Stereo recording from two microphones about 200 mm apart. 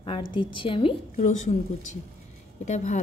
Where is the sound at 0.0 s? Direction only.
25° left (ahead or behind).